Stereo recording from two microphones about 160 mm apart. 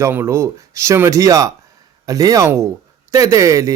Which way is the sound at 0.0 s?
15° right (ahead or behind).